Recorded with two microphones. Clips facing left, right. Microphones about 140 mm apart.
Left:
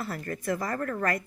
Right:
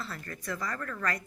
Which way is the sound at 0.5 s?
30° left (ahead or behind).